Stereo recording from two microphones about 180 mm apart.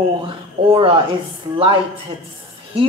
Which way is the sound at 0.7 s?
30° right (ahead or behind).